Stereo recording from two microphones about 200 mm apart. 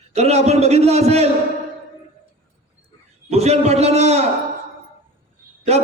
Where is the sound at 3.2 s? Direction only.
30° right (ahead or behind).